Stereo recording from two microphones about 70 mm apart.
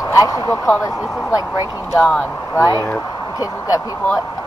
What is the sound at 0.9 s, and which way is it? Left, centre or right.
Speech, centre.